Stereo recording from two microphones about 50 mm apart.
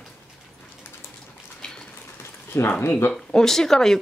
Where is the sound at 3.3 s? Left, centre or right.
Centre.